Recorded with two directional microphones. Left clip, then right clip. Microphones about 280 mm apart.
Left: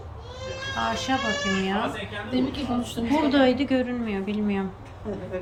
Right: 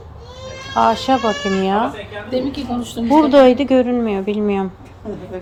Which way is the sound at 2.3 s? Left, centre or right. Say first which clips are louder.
Right 7 dB; right.